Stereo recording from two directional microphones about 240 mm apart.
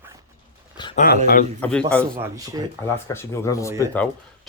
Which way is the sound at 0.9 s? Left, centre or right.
Left.